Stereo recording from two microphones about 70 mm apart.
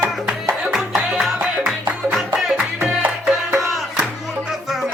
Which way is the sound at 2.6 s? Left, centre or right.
Centre.